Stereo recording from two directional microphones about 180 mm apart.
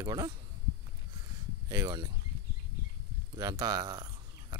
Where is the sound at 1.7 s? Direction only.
20° right (ahead or behind).